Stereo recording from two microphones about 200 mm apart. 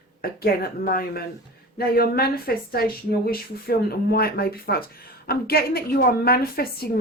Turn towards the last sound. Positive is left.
turn(degrees=50)  # may be behind; listen again after turning